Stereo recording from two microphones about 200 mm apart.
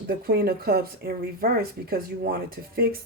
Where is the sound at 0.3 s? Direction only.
50° right (ahead or behind).